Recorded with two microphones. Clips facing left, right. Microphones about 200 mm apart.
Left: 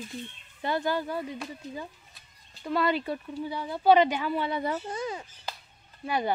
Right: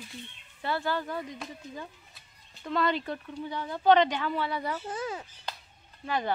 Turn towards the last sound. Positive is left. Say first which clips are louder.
# left 2 dB
turn(degrees=10)  # may be behind; listen again after turning